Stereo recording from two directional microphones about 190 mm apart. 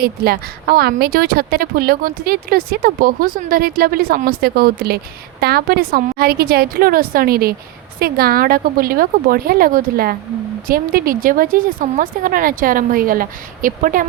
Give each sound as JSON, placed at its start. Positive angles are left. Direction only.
{"t": 0.0, "sound": "a woman's voice", "side_deg": -55}